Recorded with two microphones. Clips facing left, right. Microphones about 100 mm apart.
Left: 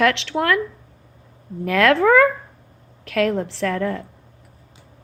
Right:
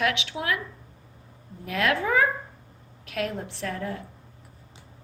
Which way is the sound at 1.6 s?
65° left (ahead or behind).